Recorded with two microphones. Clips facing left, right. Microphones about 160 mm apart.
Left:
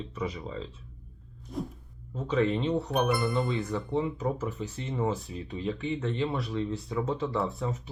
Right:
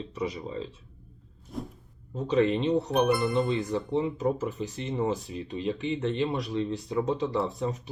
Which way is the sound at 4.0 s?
20° right (ahead or behind).